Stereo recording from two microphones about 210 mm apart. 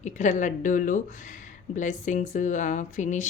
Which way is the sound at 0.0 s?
35° left (ahead or behind).